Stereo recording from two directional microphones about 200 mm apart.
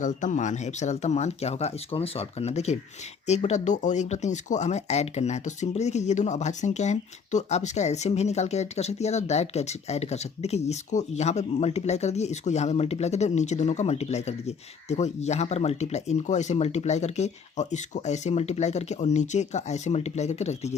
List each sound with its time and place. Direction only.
0.0 s speech: 40° left (ahead or behind)